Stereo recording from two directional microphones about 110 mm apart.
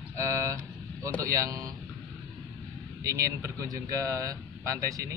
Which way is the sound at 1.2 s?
30° right (ahead or behind).